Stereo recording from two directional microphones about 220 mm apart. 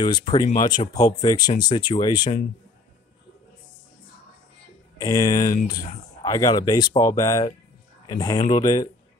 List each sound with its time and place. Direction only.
0.0 s speech: 20° left (ahead or behind)
5.0 s speech: 15° left (ahead or behind)